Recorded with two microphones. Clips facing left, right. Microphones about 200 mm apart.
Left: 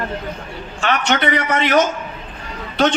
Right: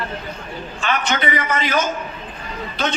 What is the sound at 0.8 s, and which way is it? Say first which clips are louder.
A man's voice: left 3 dB; 70° left (ahead or behind).